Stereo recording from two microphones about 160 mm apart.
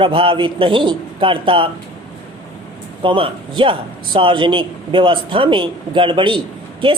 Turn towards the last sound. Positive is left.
turn(degrees=-30)  # may be behind; listen again after turning